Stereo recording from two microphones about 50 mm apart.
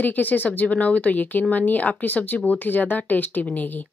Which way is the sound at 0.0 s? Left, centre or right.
Left.